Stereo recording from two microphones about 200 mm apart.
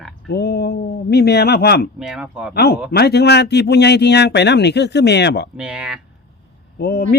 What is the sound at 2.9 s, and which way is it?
A man's voice, 55° left (ahead or behind).